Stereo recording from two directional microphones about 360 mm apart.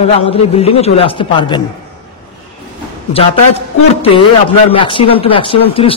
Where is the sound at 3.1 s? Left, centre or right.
Centre.